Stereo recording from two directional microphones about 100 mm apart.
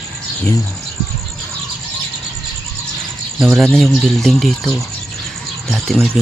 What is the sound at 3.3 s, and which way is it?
Speech, 5° right (ahead or behind).